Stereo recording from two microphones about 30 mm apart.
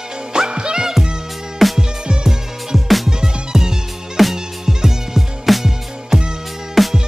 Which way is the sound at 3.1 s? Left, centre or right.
Centre.